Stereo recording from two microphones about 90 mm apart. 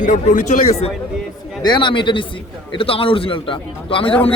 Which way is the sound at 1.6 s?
60° left (ahead or behind).